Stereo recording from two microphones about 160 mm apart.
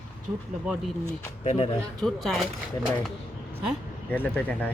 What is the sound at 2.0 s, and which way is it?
Speech, centre (ahead or behind).